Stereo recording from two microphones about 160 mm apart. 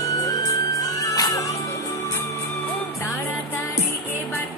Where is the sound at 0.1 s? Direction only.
20° left (ahead or behind).